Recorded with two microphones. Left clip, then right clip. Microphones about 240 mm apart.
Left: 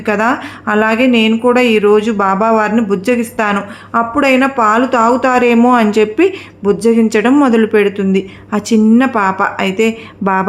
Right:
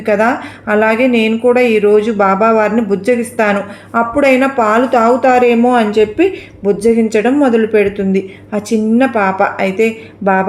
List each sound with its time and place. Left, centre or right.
0.0 s speech: left